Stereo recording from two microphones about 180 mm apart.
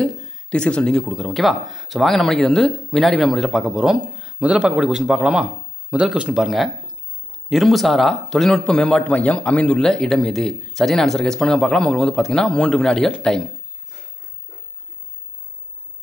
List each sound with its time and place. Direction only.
0.0 s speech: 5° left (ahead or behind)